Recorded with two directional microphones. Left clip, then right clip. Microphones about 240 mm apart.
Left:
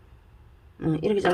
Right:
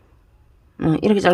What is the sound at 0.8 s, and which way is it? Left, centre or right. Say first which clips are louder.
Speech: right 6 dB; right.